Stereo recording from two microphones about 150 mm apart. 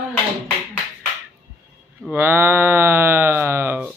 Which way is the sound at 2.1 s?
15° right (ahead or behind).